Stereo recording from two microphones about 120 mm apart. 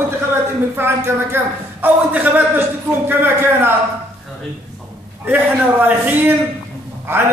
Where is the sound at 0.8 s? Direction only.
20° right (ahead or behind).